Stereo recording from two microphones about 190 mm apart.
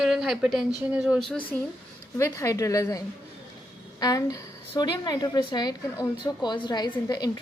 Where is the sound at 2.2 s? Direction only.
15° left (ahead or behind).